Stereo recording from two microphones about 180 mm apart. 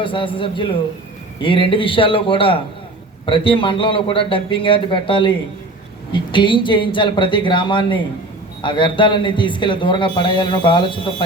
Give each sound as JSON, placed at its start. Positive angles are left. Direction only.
{"t": 0.0, "sound": "speech", "side_deg": 30}